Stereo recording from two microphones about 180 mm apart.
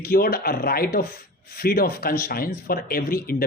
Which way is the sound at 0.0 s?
60° left (ahead or behind).